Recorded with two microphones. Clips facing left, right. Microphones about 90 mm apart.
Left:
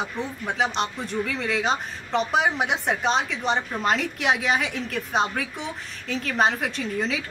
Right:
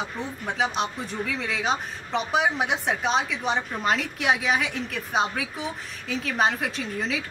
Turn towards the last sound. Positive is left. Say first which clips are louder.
# left 2 dB
turn(degrees=0)  # may be behind; listen again after turning